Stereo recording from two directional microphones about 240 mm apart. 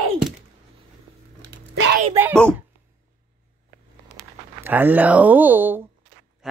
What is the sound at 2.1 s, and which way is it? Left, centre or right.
Speech, centre.